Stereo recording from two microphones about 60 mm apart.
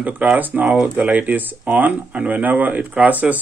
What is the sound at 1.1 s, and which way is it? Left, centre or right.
Speech, right.